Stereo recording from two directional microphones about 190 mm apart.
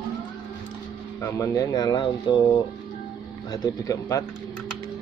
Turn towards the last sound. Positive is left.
turn(degrees=15)  # may be behind; listen again after turning